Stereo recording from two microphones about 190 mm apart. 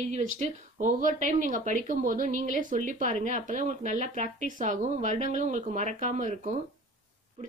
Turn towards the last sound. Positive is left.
turn(degrees=-40)  # may be behind; listen again after turning